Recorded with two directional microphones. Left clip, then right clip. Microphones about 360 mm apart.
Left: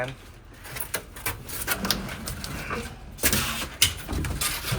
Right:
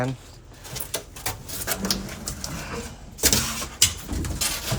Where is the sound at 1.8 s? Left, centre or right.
Left.